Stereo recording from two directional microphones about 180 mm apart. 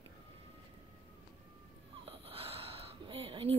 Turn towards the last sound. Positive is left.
turn(degrees=-30)  # may be behind; listen again after turning